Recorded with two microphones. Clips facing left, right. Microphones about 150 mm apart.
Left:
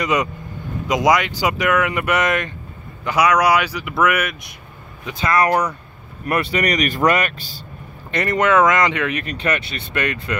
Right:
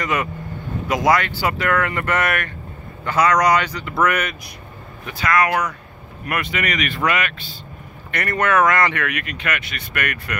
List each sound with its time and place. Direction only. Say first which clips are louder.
0.0 s speech: left 3 dB; 15° left (ahead or behind)
5.0 s speech: left 1 dB; 25° left (ahead or behind)
8.1 s speech: left 3 dB; 20° left (ahead or behind)